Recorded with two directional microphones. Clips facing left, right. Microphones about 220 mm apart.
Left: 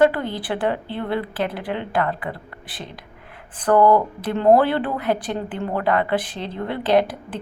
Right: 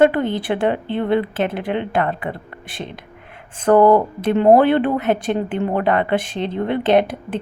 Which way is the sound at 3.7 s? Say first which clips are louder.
Right 3 dB; 25° right (ahead or behind).